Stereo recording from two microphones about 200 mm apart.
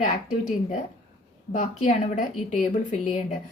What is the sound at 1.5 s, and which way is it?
Speech, 40° left (ahead or behind).